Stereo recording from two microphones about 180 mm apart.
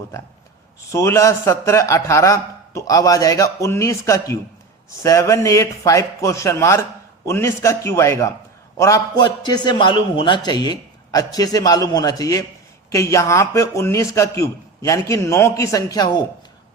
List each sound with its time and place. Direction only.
0.9 s a man's voice: 15° left (ahead or behind)